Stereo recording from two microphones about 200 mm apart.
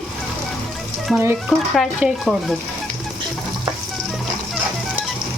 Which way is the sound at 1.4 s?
Centre (ahead or behind).